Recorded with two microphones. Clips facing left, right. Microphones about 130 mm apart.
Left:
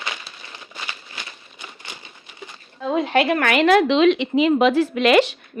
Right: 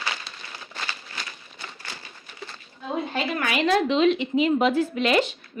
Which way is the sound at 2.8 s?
90° left.